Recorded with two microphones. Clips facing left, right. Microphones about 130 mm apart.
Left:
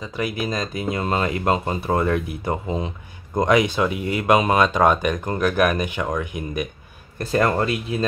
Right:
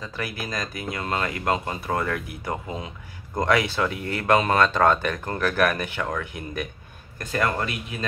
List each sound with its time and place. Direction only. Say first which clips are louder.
0.0 s speech: left 6 dB; 15° left (ahead or behind)
7.2 s speech: left 6 dB; 35° left (ahead or behind)